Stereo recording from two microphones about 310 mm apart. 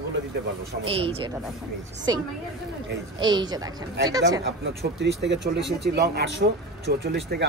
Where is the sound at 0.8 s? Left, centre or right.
Centre.